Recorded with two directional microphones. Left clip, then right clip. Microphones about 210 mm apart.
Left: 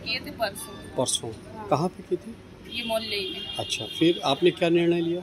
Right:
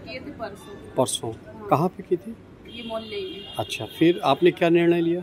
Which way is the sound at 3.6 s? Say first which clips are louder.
Right 3 dB; 20° right (ahead or behind).